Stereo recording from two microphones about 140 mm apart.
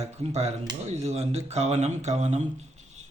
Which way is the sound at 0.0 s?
50° right (ahead or behind).